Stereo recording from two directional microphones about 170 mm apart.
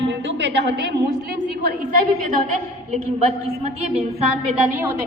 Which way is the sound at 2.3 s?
45° right (ahead or behind).